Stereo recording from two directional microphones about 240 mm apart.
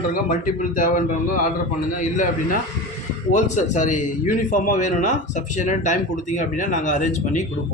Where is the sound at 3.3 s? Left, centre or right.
Left.